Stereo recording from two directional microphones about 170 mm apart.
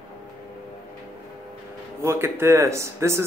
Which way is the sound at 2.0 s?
15° right (ahead or behind).